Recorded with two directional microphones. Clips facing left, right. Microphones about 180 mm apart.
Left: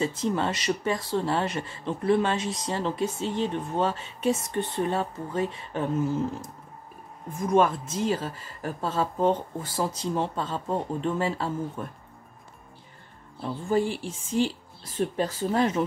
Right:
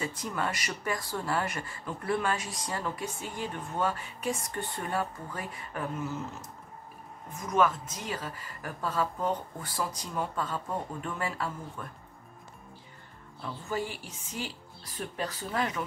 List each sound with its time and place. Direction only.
0.0 s speech: 25° left (ahead or behind)
13.4 s speech: 30° left (ahead or behind)